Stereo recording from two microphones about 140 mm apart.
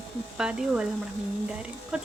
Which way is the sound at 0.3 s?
5° right (ahead or behind).